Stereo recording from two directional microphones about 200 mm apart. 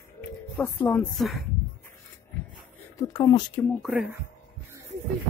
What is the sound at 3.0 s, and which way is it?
Speech, 15° left (ahead or behind).